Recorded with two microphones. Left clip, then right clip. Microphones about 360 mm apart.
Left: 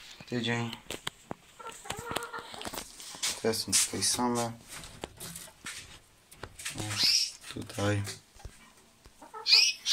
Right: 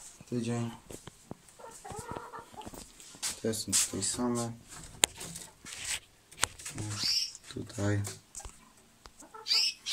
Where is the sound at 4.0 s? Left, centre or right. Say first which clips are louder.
Left 4 dB; centre.